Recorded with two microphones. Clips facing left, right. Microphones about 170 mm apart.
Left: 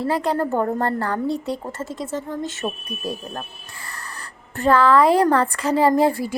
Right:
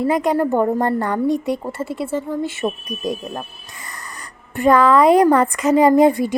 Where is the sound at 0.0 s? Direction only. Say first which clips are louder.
Right 4 dB; 15° right (ahead or behind).